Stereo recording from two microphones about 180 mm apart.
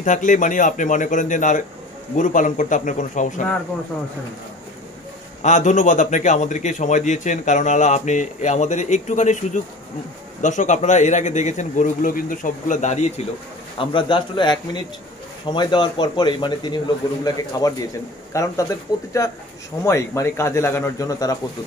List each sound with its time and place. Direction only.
0.0 s a man's voice: 45° left (ahead or behind)
5.4 s a man's voice: 40° left (ahead or behind)
13.7 s a man's voice: 25° left (ahead or behind)